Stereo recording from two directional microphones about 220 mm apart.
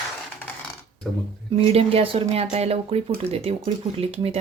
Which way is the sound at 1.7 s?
25° right (ahead or behind).